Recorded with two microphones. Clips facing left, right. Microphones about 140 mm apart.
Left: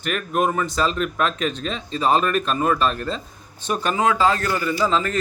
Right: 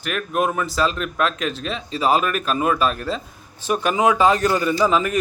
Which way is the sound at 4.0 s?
15° right (ahead or behind).